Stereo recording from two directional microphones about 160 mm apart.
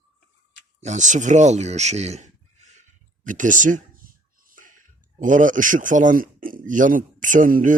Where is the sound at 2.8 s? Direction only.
55° right (ahead or behind).